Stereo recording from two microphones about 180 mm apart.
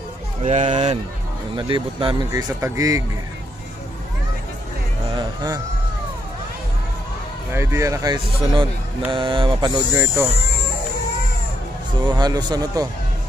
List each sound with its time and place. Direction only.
0.4 s speech: 40° right (ahead or behind)
1.5 s speech: 30° right (ahead or behind)
2.3 s speech: 15° right (ahead or behind)
5.1 s a sound: 20° right (ahead or behind)
7.5 s speech: 15° right (ahead or behind)
12.0 s speech: 25° right (ahead or behind)